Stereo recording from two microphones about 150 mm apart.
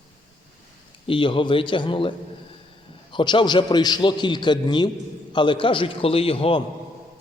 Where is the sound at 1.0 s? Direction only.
35° left (ahead or behind).